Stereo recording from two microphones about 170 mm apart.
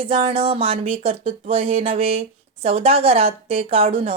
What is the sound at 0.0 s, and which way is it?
Speech, 35° right (ahead or behind).